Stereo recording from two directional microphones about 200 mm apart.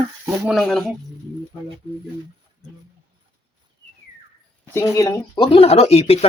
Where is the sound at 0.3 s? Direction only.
5° right (ahead or behind).